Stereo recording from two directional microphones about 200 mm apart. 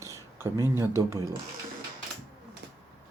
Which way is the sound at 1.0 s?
15° right (ahead or behind).